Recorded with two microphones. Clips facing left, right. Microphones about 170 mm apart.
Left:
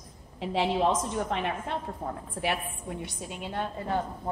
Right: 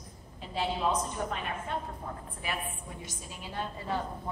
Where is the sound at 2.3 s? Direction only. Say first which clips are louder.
Left 7 dB; 75° left (ahead or behind).